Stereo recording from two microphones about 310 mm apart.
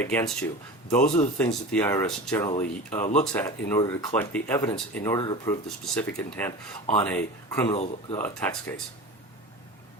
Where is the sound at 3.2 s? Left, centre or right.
Centre.